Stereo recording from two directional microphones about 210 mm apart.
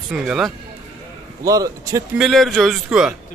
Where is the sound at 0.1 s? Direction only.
Centre (ahead or behind).